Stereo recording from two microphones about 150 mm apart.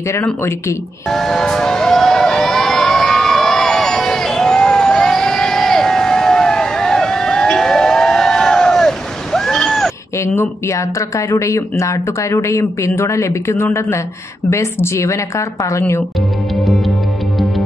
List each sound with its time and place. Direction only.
0.1 s speech: 20° left (ahead or behind)
1.0 s vehicle: centre (ahead or behind)
10.1 s speech: 15° left (ahead or behind)
16.5 s music: centre (ahead or behind)